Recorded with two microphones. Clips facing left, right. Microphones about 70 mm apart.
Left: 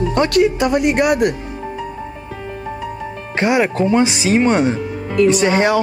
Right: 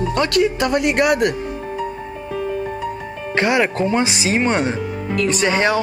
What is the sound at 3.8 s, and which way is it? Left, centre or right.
Speech, right.